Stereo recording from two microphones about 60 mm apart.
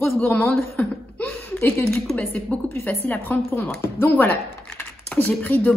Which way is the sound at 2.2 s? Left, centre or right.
Left.